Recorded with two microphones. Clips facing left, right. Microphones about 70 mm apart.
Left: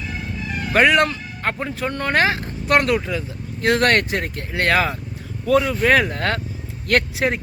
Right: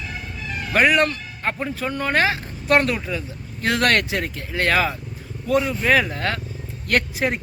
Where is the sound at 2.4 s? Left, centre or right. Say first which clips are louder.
Even; left.